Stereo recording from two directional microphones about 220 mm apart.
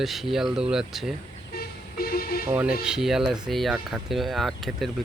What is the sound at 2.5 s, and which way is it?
Speech, 5° right (ahead or behind).